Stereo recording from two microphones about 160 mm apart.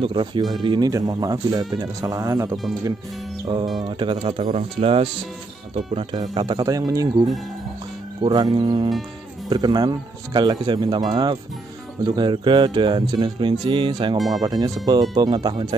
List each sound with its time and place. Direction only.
0.0 s speech: 30° right (ahead or behind)
3.8 s speech: 30° right (ahead or behind)
6.3 s speech: 25° right (ahead or behind)
14.1 s speech: centre (ahead or behind)
14.4 s speech: 25° right (ahead or behind)